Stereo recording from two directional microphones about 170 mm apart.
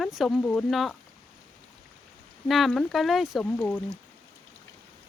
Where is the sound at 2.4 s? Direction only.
Centre (ahead or behind).